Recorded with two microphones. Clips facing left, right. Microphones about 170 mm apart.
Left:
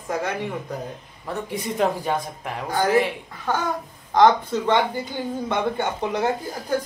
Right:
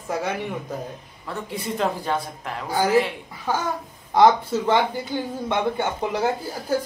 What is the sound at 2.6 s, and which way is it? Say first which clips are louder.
A woman's voice: even; 10° right (ahead or behind).